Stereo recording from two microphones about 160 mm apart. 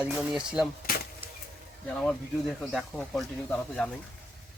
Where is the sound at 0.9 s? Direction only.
65° left (ahead or behind).